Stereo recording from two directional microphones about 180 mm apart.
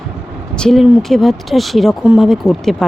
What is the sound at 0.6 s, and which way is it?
Speech, centre (ahead or behind).